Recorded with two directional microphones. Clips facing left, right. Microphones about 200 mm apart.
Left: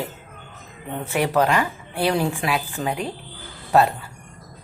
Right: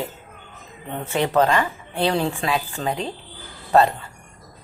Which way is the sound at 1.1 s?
10° left (ahead or behind).